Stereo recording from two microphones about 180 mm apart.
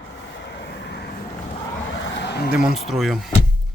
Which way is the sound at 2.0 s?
80° left.